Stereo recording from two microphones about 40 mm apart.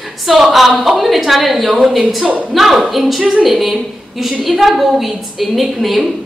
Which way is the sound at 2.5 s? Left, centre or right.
Centre.